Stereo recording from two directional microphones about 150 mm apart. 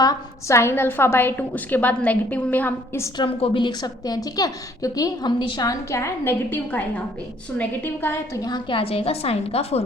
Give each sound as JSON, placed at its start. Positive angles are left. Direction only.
{"t": 0.0, "sound": "a woman's voice", "side_deg": 20}
{"t": 3.2, "sound": "a woman's voice", "side_deg": 35}